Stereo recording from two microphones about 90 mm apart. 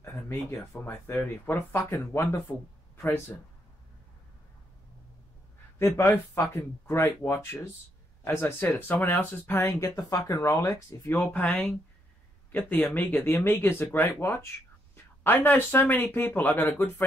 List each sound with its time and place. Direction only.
0.0 s a sound: 30° left (ahead or behind)
0.8 s speech: 25° left (ahead or behind)
1.8 s speech: 30° left (ahead or behind)
5.9 s speech: 30° left (ahead or behind)
9.8 s speech: 35° left (ahead or behind)
11.1 s speech: 20° left (ahead or behind)